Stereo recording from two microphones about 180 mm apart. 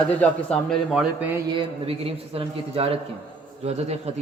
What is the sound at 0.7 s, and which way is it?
Speech, 5° right (ahead or behind).